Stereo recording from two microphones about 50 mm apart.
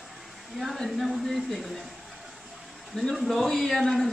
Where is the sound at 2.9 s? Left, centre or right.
Centre.